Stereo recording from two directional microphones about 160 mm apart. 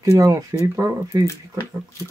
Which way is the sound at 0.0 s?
20° right (ahead or behind).